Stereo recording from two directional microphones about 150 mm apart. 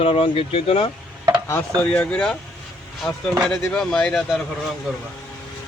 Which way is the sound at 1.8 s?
10° left (ahead or behind).